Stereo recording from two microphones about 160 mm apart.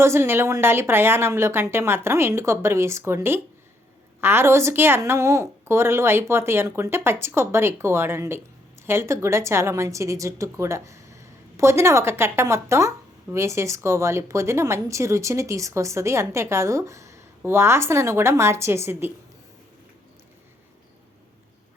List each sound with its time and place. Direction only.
0.0 s a woman's voice: 15° right (ahead or behind)